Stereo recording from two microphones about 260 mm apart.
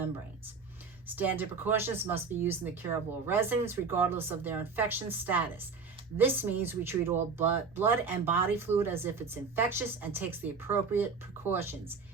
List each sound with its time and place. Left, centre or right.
1.0 s speech: centre